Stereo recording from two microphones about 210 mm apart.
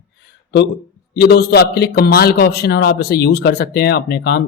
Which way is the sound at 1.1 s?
50° left (ahead or behind).